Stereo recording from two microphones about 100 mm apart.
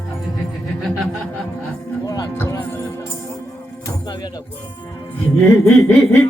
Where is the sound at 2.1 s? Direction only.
35° left (ahead or behind).